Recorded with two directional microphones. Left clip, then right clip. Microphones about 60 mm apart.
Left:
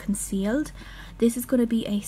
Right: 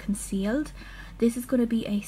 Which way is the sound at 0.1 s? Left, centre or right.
Centre.